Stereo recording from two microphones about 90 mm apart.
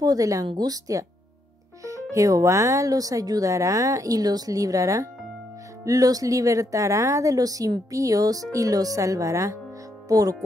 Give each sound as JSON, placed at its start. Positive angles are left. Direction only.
{"t": 0.0, "sound": "speech", "side_deg": -40}